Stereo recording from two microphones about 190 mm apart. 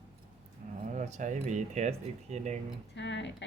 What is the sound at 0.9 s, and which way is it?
Speech, 40° right (ahead or behind).